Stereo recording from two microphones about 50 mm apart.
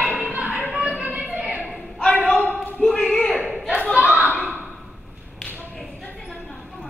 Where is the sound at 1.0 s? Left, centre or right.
Right.